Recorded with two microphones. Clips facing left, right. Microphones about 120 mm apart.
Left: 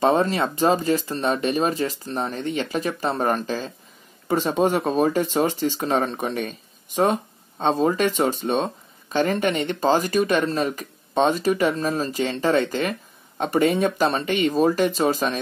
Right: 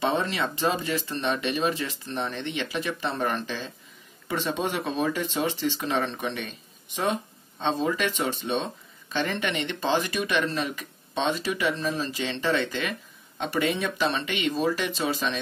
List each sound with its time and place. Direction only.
0.0 s speech: 45° left (ahead or behind)